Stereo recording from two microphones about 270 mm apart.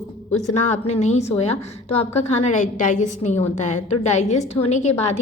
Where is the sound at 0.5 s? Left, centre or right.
Left.